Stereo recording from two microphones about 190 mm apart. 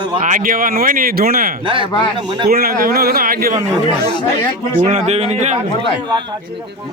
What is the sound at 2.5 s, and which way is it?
Speech, 50° right (ahead or behind).